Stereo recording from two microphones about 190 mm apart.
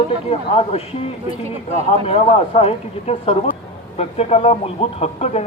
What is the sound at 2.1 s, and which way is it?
Speech, 30° left (ahead or behind).